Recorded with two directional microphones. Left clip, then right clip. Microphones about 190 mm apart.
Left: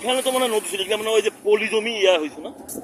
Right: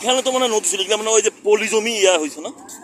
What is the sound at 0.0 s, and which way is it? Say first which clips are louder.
A man's voice: right 3 dB; 30° right (ahead or behind).